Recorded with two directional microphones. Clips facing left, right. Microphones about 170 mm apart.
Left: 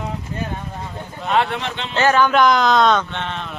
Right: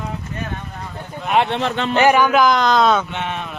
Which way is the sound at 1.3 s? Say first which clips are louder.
Right 1 dB; 20° right (ahead or behind).